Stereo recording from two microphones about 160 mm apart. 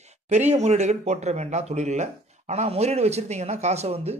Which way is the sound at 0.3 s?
45° right (ahead or behind).